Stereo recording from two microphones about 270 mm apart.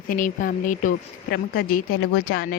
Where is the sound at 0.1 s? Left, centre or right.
Left.